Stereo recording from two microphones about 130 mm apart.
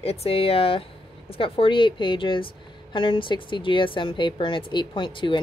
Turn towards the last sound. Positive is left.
turn(degrees=40)  # may be behind; listen again after turning